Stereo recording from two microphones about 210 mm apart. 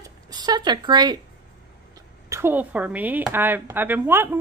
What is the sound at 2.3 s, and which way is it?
Speech, 10° right (ahead or behind).